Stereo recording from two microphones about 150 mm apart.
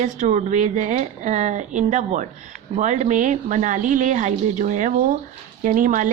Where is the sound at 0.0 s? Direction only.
50° right (ahead or behind).